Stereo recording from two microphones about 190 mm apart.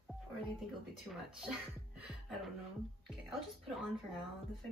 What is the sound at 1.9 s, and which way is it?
Music, 5° right (ahead or behind).